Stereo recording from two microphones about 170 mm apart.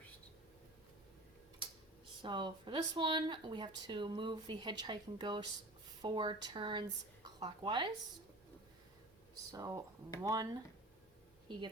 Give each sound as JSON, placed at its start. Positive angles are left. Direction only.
{"t": 2.2, "sound": "speech", "side_deg": -30}
{"t": 9.5, "sound": "speech", "side_deg": -20}